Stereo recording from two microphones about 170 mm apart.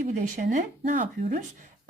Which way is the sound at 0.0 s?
50° right (ahead or behind).